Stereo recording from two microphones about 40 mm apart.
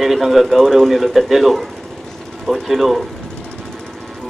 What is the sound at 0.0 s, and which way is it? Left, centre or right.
Speech, centre.